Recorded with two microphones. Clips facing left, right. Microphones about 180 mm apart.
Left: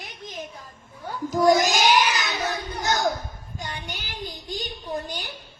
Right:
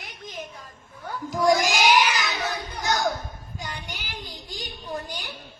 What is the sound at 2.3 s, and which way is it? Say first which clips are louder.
Children playing: left 2 dB; 20° left (ahead or behind).